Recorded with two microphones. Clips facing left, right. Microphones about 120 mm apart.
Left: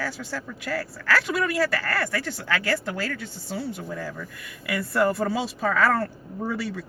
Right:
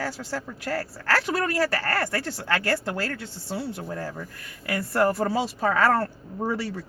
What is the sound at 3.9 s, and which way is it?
Speech, 40° right (ahead or behind).